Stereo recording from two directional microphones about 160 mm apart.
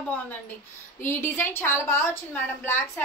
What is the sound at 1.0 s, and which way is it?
A woman's voice, 15° left (ahead or behind).